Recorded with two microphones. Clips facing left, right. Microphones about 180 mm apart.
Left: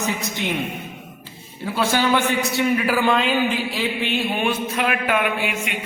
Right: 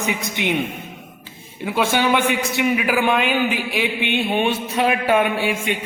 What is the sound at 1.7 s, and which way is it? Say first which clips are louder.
A man's voice: right 1 dB; 20° right (ahead or behind).